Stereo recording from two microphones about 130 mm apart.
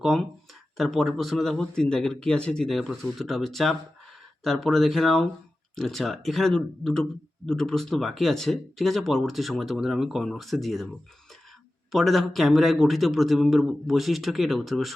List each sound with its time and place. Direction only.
0.0 s speech: centre (ahead or behind)
11.9 s speech: centre (ahead or behind)